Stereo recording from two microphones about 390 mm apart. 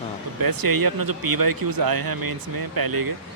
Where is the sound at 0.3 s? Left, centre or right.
Right.